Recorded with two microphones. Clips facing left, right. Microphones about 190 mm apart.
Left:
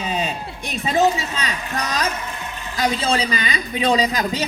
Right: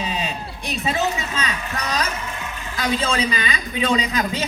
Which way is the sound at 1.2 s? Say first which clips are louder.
Even; 40° left (ahead or behind).